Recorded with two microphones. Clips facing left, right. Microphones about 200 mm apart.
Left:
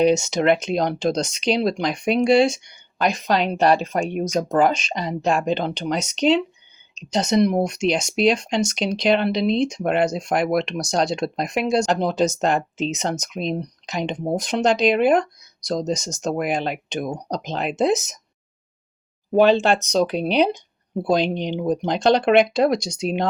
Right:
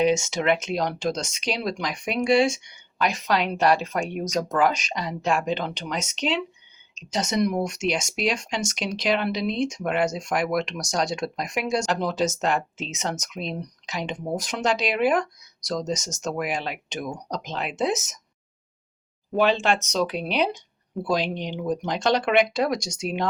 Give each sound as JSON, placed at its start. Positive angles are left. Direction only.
{"t": 0.2, "sound": "speech", "side_deg": 35}
{"t": 19.4, "sound": "speech", "side_deg": 35}